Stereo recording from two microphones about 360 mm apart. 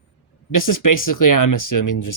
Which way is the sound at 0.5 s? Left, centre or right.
Left.